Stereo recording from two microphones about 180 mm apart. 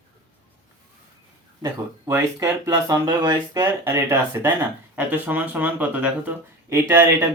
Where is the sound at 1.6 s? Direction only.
15° right (ahead or behind).